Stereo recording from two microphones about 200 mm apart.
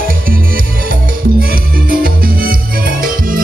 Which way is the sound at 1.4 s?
45° right (ahead or behind).